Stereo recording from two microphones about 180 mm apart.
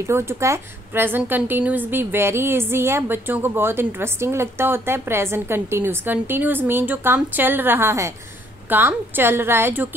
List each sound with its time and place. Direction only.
0.0 s a woman's voice: 15° right (ahead or behind)